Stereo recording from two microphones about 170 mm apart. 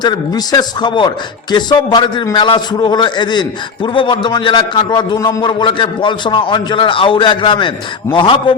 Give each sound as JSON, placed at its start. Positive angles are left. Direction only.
{"t": 0.0, "sound": "a man's voice", "side_deg": 25}